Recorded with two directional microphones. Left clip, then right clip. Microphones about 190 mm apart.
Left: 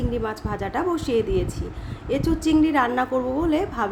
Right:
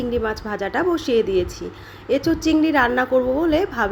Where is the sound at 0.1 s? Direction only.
15° right (ahead or behind).